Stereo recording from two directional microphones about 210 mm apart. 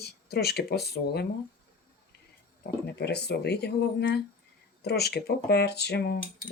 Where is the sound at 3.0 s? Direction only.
50° left (ahead or behind).